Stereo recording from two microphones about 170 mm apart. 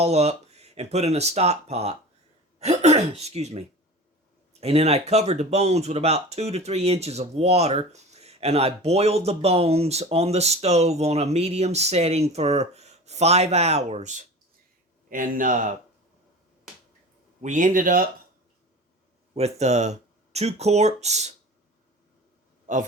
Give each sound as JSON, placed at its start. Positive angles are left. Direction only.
{"t": 0.0, "sound": "speech", "side_deg": -40}
{"t": 4.6, "sound": "speech", "side_deg": -35}
{"t": 17.4, "sound": "speech", "side_deg": -50}
{"t": 19.3, "sound": "speech", "side_deg": -40}
{"t": 22.7, "sound": "a man's voice", "side_deg": -45}